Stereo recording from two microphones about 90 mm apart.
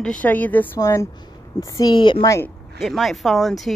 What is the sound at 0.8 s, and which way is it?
Speech, 35° left (ahead or behind).